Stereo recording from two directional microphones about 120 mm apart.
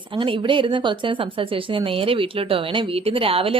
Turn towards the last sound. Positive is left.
turn(degrees=-50)  # may be behind; listen again after turning